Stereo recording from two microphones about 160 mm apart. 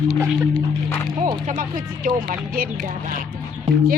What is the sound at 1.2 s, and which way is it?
Speech, 55° right (ahead or behind).